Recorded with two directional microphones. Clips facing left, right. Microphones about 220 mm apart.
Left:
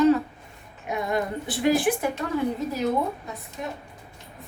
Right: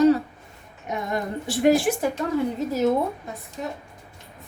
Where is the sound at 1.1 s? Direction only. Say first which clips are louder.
Right 2 dB; 45° right (ahead or behind).